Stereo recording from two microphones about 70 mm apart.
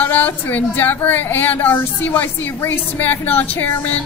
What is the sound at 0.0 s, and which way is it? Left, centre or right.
A woman's voice, left.